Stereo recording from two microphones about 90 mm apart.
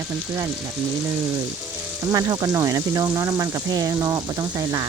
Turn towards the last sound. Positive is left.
turn(degrees=-40)  # may be behind; listen again after turning